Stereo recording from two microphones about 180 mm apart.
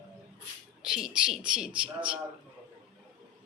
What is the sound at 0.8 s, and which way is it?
A woman's voice, 5° right (ahead or behind).